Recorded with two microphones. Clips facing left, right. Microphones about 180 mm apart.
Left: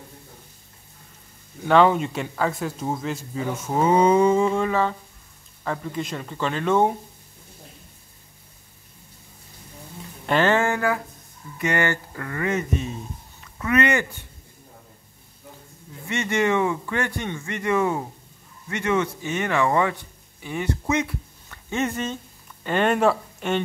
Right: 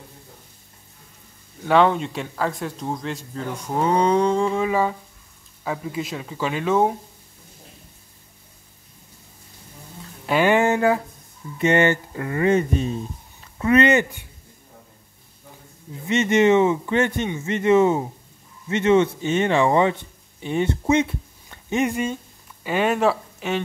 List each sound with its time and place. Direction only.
1.6 s speech: centre (ahead or behind)
10.2 s speech: 10° right (ahead or behind); by 14.0 s 25° right (ahead or behind)
15.9 s speech: 20° right (ahead or behind); by 23.6 s centre (ahead or behind)